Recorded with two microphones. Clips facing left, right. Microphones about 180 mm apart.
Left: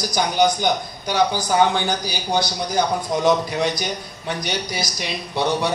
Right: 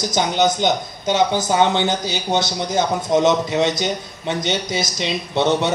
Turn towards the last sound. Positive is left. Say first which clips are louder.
# right 3 dB
turn(degrees=-25)  # may be behind; listen again after turning